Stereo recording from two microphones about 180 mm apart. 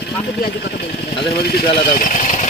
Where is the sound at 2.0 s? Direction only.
45° left (ahead or behind).